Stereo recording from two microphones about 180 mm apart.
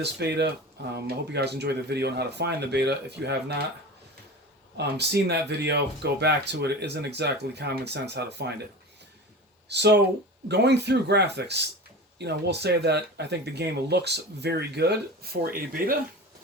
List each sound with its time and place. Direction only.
0.0 s speech: 65° right (ahead or behind)
4.8 s speech: 65° right (ahead or behind)
9.6 s speech: 65° right (ahead or behind)